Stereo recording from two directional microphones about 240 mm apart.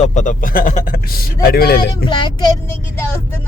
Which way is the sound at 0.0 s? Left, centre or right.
Left.